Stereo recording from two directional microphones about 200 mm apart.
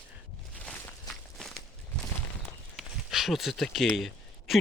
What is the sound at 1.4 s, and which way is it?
Walk, centre (ahead or behind).